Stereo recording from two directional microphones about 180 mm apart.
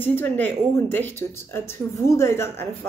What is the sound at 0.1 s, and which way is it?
Speech, 10° left (ahead or behind).